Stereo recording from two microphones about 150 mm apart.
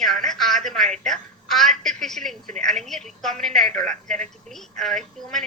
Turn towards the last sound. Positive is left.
turn(degrees=0)  # may be behind; listen again after turning